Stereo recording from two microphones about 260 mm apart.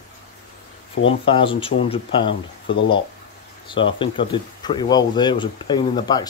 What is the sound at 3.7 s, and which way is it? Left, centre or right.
Speech, centre.